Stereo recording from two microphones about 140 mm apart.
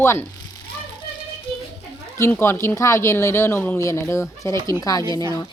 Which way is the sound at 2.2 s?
15° left (ahead or behind).